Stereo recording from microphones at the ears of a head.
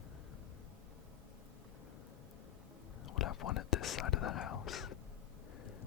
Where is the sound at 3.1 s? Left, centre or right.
Left.